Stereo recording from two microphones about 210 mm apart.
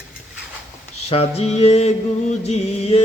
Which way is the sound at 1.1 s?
30° left (ahead or behind).